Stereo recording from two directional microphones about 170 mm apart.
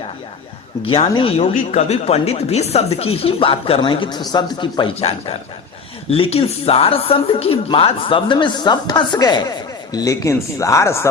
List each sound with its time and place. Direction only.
0.9 s speech: 30° left (ahead or behind); by 11.1 s 15° left (ahead or behind)